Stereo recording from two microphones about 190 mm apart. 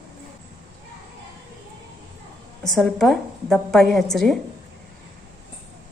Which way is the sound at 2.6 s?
Centre (ahead or behind).